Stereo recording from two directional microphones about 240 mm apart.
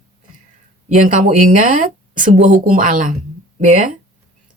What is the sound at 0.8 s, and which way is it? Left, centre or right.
Speech, right.